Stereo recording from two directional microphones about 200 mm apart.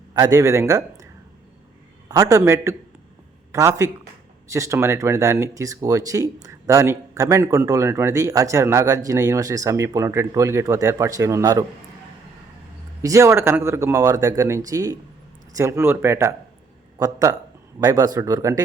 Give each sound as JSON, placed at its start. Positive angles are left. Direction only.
{"t": 0.1, "sound": "speech", "side_deg": -20}
{"t": 2.0, "sound": "speech", "side_deg": -15}
{"t": 13.0, "sound": "speech", "side_deg": -15}